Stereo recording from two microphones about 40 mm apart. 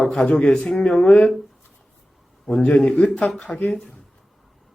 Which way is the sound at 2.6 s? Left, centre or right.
Left.